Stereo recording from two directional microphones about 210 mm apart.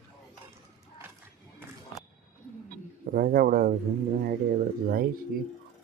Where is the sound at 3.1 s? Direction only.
45° right (ahead or behind).